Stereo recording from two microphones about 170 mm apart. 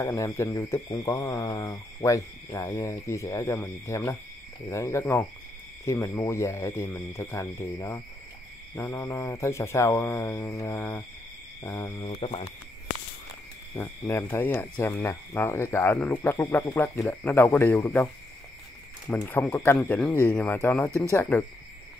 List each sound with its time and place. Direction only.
0.0 s speech: 20° left (ahead or behind)
12.1 s owl: 35° left (ahead or behind)
13.7 s speech: 15° left (ahead or behind)
19.1 s speech: 10° left (ahead or behind)